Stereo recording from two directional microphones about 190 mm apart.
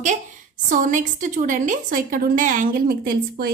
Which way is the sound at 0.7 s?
45° right (ahead or behind).